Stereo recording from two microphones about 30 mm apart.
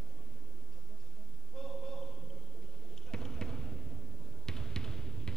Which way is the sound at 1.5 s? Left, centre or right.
Centre.